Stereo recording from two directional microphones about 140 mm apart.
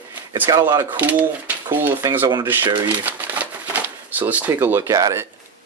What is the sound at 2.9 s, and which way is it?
Shuffling cards, 10° right (ahead or behind).